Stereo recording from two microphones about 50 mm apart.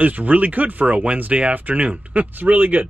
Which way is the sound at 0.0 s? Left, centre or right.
Right.